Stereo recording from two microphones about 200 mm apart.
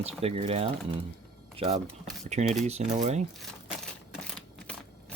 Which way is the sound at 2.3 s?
35° right (ahead or behind).